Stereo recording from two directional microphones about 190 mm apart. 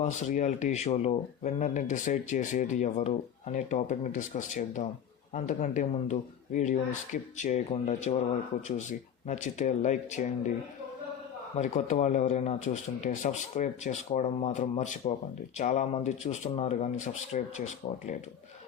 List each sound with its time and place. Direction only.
0.0 s speech: 40° left (ahead or behind)
11.5 s speech: 40° left (ahead or behind)